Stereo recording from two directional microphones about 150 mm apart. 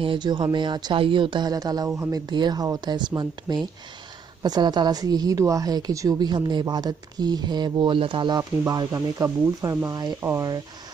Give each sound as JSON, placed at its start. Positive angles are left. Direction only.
{"t": 0.0, "sound": "a woman's voice", "side_deg": -30}